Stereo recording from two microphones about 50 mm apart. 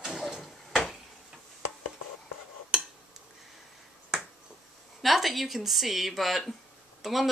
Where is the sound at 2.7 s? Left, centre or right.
Centre.